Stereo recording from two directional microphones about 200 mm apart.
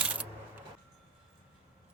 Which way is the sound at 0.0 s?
5° right (ahead or behind).